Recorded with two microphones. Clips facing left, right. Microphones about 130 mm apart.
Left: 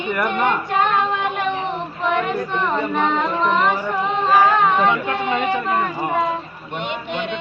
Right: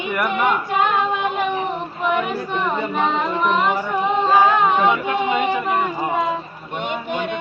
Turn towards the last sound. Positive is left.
turn(degrees=-45)  # may be behind; listen again after turning